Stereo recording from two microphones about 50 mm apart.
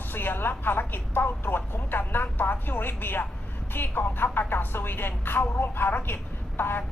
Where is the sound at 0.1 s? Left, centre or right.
Left.